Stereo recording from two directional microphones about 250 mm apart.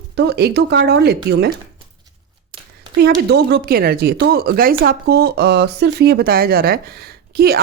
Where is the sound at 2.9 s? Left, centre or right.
Right.